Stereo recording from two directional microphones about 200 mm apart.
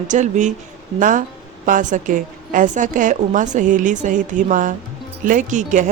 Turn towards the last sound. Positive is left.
turn(degrees=-35)  # may be behind; listen again after turning